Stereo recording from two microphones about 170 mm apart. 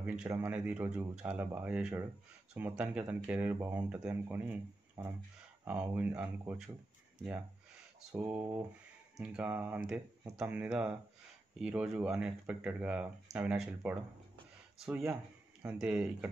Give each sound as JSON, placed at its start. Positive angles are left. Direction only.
{"t": 0.0, "sound": "speech", "side_deg": -5}
{"t": 8.1, "sound": "speech", "side_deg": -15}
{"t": 15.6, "sound": "speech", "side_deg": -5}